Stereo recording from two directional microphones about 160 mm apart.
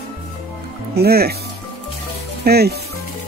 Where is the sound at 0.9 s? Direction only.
75° right (ahead or behind).